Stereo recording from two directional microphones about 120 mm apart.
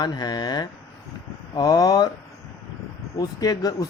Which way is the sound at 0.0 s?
35° left (ahead or behind).